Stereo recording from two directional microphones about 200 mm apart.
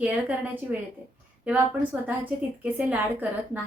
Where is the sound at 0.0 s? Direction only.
5° right (ahead or behind).